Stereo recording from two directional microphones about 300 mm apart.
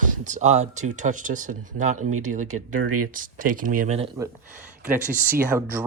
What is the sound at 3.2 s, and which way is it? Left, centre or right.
Speech, right.